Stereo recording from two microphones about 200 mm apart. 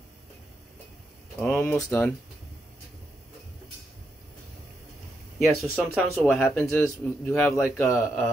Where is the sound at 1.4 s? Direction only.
5° left (ahead or behind).